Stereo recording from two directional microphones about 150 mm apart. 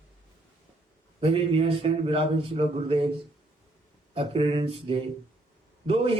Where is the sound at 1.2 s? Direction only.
40° right (ahead or behind).